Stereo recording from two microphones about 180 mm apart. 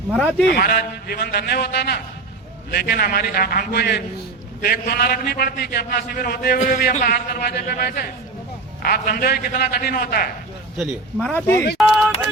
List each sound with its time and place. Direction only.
0.1 s speech: 5° left (ahead or behind)
0.4 s a man's voice: 55° left (ahead or behind)
10.8 s speech: 5° left (ahead or behind)
11.5 s a man's voice: 65° left (ahead or behind)
11.8 s speech: centre (ahead or behind)